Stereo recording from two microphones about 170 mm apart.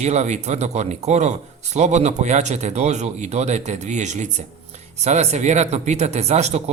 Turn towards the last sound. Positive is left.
turn(degrees=-40)  # may be behind; listen again after turning